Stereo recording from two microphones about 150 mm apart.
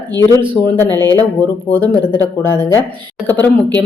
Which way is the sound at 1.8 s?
30° right (ahead or behind).